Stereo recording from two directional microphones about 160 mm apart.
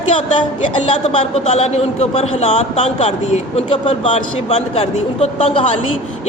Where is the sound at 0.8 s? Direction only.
45° left (ahead or behind).